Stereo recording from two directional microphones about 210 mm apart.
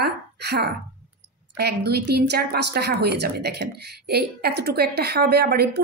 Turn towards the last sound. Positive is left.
turn(degrees=-50)  # may be behind; listen again after turning